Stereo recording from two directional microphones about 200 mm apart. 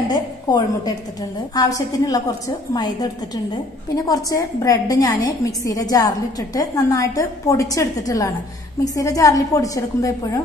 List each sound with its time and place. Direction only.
0.1 s a woman's voice: 20° left (ahead or behind)